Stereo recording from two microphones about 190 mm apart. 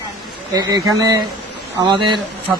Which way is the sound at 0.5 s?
20° right (ahead or behind).